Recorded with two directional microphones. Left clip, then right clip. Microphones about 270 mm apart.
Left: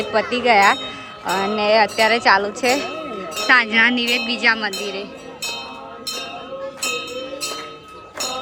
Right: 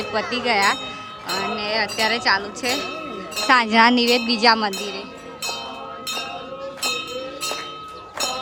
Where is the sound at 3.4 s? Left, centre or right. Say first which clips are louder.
Left 1 dB; centre.